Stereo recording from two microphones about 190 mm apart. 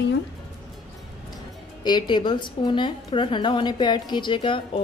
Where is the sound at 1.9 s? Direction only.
25° left (ahead or behind).